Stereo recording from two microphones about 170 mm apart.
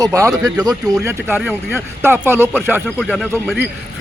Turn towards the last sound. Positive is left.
turn(degrees=0)  # may be behind; listen again after turning